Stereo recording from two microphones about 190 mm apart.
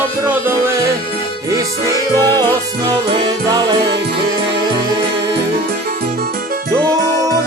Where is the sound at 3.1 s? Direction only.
20° right (ahead or behind).